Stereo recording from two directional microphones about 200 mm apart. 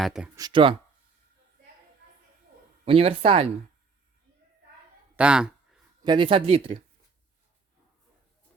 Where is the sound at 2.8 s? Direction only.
30° right (ahead or behind).